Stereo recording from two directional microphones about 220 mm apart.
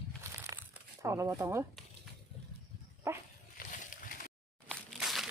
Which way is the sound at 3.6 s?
40° left (ahead or behind).